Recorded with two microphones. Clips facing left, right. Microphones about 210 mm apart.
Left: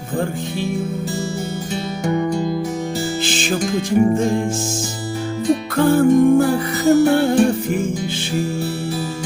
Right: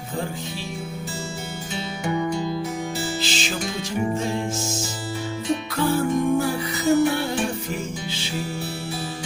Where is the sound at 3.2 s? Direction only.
50° left (ahead or behind).